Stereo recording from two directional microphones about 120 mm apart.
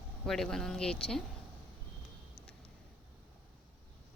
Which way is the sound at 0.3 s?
5° left (ahead or behind).